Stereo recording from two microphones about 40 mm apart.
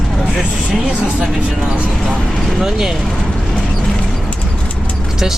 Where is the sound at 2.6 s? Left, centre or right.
Centre.